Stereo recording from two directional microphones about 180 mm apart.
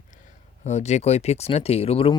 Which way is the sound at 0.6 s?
40° left (ahead or behind).